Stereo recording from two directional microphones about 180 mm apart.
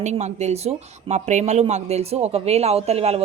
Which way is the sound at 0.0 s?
40° right (ahead or behind).